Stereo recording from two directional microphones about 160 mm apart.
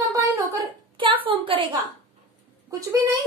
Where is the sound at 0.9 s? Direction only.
30° right (ahead or behind).